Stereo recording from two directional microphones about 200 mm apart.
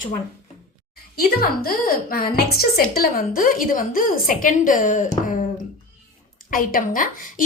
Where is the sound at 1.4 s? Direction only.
45° left (ahead or behind).